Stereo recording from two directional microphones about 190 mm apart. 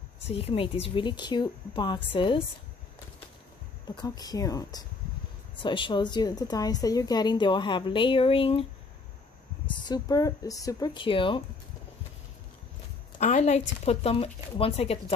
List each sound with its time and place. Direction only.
0.3 s a woman's voice: 30° left (ahead or behind)
3.8 s a woman's voice: 20° left (ahead or behind)
9.7 s a woman's voice: 25° left (ahead or behind)
13.2 s speech: 35° left (ahead or behind)